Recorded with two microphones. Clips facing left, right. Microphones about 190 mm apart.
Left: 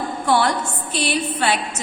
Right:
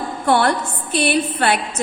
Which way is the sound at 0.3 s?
55° right (ahead or behind).